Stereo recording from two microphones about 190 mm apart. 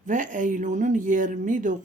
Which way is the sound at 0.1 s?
45° right (ahead or behind).